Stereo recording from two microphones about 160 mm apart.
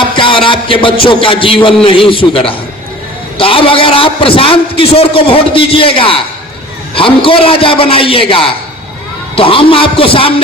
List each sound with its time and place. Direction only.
0.2 s a man's voice: 30° left (ahead or behind)